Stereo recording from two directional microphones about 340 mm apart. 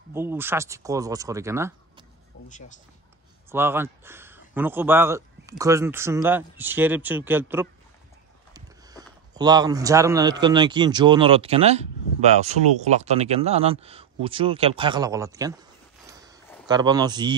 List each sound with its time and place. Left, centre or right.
0.1 s a man's voice: centre
2.4 s speech: left
3.4 s a man's voice: centre
16.1 s a sound: centre
16.6 s a man's voice: centre